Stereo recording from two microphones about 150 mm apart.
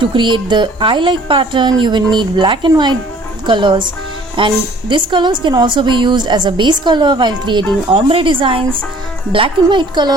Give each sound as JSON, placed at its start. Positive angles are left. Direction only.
{"t": 0.0, "sound": "a woman's voice", "side_deg": -35}